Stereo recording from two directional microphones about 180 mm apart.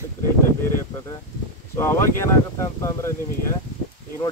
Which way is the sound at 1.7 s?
15° left (ahead or behind).